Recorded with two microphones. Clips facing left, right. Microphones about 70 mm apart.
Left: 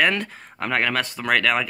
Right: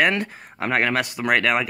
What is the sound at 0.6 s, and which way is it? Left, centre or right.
Speech, right.